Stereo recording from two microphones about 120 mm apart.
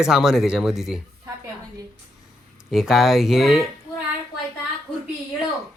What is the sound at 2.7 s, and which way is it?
Speech, 5° right (ahead or behind).